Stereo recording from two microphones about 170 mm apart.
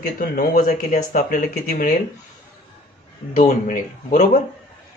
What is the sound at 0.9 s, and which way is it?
Speech, 50° left (ahead or behind).